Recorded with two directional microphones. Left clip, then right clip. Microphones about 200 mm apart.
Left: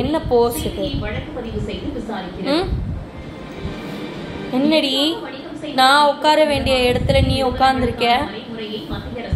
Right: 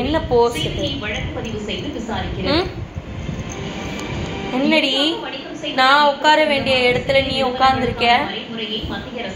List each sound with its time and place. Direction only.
0.1 s speech: 15° left (ahead or behind)
4.6 s speech: 15° left (ahead or behind)